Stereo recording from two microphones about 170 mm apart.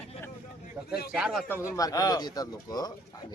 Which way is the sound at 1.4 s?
15° left (ahead or behind).